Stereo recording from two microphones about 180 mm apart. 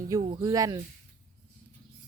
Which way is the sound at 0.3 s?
20° right (ahead or behind).